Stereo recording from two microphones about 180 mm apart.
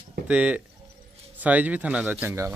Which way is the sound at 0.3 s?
10° right (ahead or behind).